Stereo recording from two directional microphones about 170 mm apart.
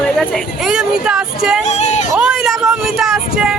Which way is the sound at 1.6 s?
40° left (ahead or behind).